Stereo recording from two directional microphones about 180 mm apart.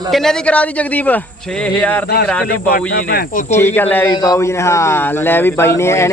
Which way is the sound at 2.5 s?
55° left (ahead or behind).